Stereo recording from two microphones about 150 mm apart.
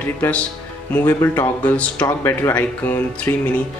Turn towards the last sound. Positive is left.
turn(degrees=10)  # may be behind; listen again after turning